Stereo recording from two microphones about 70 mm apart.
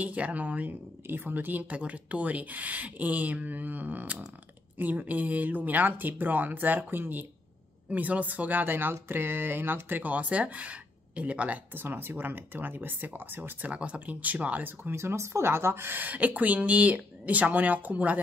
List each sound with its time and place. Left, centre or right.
0.0 s speech: right